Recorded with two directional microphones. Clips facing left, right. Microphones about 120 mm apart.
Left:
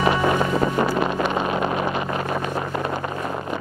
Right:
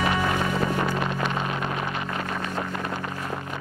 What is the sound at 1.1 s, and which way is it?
Vehicle, 20° left (ahead or behind).